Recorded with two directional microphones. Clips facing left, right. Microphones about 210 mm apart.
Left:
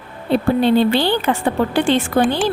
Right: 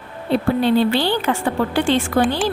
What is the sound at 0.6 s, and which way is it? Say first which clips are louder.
A woman's voice: left 2 dB; 20° left (ahead or behind).